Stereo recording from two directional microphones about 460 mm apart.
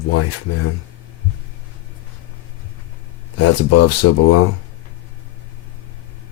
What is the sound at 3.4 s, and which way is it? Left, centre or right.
Speech, left.